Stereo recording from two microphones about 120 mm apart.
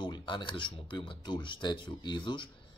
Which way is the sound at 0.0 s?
40° left (ahead or behind).